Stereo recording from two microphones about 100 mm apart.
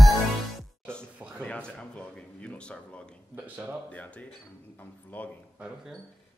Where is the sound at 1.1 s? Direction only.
15° right (ahead or behind).